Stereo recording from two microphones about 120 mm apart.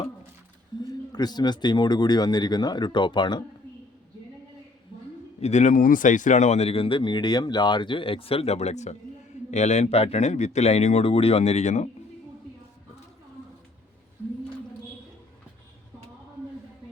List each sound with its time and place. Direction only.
0.8 s speech: 35° left (ahead or behind)
5.4 s speech: 75° left (ahead or behind)